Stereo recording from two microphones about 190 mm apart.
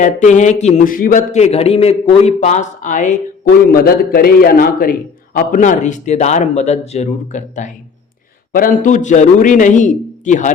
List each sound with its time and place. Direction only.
0.0 s a man's voice: 40° left (ahead or behind)
3.7 s a man's voice: 50° left (ahead or behind)